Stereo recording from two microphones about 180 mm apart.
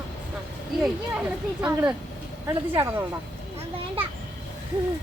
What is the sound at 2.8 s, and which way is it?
Speech, 10° right (ahead or behind).